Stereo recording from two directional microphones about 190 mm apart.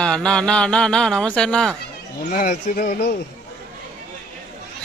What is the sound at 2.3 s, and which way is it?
Speech, 45° left (ahead or behind).